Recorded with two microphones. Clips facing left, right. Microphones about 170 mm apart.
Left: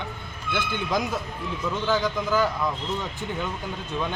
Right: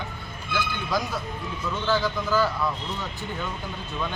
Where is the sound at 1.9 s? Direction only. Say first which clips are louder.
Even; 15° left (ahead or behind).